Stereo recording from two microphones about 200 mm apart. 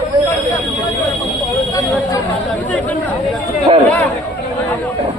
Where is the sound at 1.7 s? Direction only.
15° left (ahead or behind).